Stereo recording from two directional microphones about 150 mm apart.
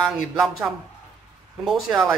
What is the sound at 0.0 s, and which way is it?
Speech, centre (ahead or behind).